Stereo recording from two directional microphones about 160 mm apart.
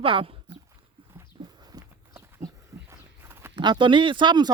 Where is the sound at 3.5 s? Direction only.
30° right (ahead or behind).